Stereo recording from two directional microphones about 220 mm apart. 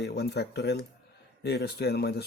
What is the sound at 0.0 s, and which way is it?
Speech, 50° left (ahead or behind).